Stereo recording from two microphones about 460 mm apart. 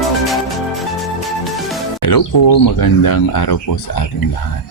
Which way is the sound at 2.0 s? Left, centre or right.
Left.